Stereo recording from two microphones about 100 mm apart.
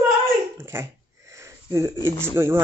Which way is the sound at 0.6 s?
25° right (ahead or behind).